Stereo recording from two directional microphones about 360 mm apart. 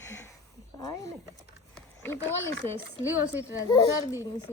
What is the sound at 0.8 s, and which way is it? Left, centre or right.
Speech, centre.